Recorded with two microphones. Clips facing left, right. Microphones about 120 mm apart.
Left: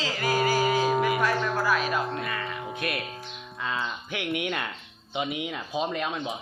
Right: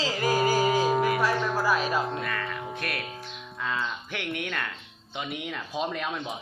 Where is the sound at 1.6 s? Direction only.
35° right (ahead or behind).